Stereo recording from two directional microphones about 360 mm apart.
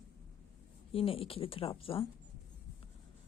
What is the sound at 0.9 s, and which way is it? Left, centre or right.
A woman's voice, centre.